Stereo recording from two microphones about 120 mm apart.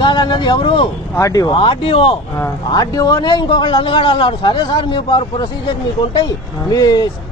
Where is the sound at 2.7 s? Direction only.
30° left (ahead or behind).